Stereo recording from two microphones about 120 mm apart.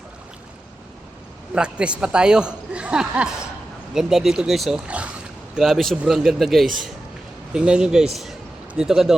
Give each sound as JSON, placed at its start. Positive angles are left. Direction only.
{"t": 1.5, "sound": "a man's voice", "side_deg": -10}
{"t": 4.9, "sound": "a sound", "side_deg": -10}
{"t": 5.5, "sound": "a man's voice", "side_deg": 0}